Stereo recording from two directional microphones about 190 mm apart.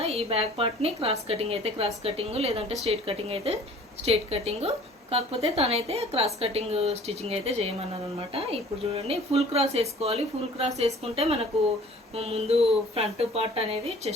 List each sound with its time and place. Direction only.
0.0 s a woman's voice: 30° right (ahead or behind)